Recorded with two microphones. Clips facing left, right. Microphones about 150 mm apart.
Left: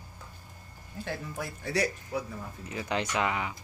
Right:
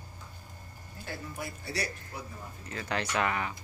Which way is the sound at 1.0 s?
90° left.